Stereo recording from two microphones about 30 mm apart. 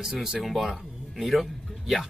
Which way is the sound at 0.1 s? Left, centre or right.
Right.